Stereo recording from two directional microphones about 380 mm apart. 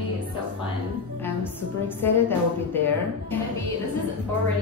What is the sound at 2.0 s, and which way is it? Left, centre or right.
Speech, centre.